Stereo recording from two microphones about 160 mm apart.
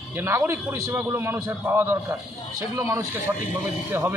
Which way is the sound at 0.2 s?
15° right (ahead or behind).